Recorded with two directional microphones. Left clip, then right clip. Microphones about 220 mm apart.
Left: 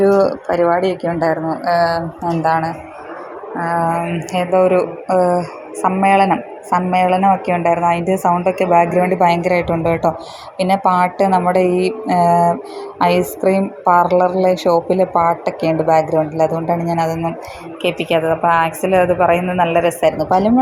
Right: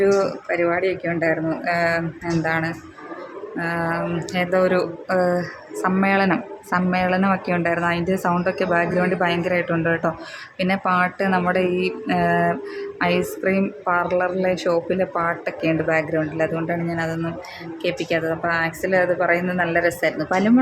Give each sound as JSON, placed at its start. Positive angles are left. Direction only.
{"t": 0.5, "sound": "a woman's voice", "side_deg": 10}
{"t": 1.2, "sound": "speech", "side_deg": -10}
{"t": 3.6, "sound": "speech", "side_deg": -15}
{"t": 4.3, "sound": "a woman's voice", "side_deg": 5}